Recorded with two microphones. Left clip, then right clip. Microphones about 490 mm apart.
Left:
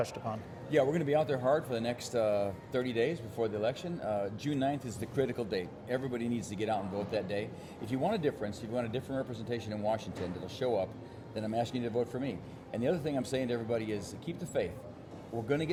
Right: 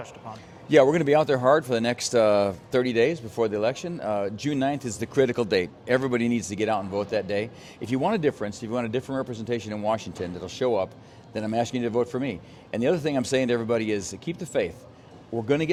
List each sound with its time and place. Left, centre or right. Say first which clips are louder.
0.7 s speech: right 11 dB; right